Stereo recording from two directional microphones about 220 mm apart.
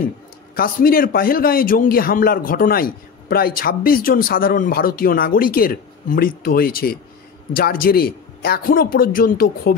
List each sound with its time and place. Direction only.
0.6 s a man's voice: 40° left (ahead or behind)